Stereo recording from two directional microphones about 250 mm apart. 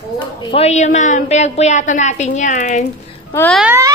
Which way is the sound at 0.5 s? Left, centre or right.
Left.